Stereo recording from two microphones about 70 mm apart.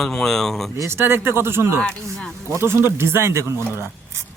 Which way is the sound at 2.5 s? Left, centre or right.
Right.